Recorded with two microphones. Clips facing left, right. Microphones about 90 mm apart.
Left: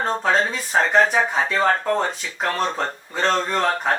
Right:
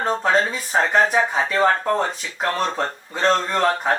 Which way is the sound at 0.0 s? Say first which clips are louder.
Right 1 dB; 5° right (ahead or behind).